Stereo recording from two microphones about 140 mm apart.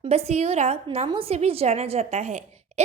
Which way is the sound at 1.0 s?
40° right (ahead or behind).